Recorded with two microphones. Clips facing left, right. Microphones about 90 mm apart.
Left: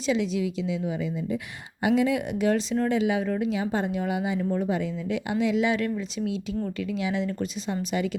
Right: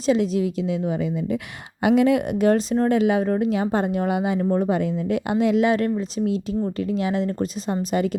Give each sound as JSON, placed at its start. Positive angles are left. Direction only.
{"t": 0.1, "sound": "speech", "side_deg": -45}
{"t": 1.8, "sound": "speech", "side_deg": -60}